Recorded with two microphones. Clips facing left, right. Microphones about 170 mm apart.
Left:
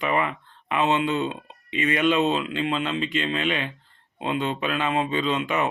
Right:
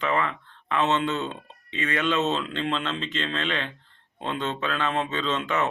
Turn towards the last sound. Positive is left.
turn(degrees=15)  # may be behind; listen again after turning